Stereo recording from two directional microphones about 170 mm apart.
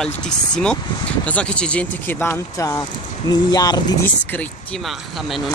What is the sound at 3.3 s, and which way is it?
Speech, 25° left (ahead or behind).